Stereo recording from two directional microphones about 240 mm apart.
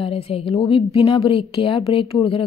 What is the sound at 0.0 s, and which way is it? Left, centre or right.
A woman's voice, left.